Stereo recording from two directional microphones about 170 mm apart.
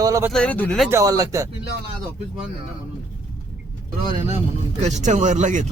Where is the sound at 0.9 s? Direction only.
20° right (ahead or behind).